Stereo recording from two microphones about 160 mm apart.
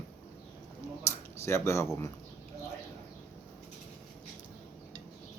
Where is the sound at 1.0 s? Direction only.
15° left (ahead or behind).